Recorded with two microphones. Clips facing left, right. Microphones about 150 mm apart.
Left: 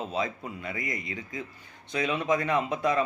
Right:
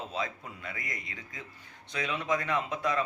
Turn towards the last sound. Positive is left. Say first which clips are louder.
# left 4 dB
turn(degrees=20)  # may be behind; listen again after turning